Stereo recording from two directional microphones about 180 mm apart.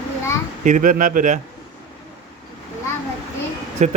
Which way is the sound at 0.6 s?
45° right (ahead or behind).